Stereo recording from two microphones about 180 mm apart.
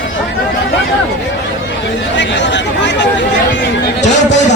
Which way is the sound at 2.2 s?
80° left.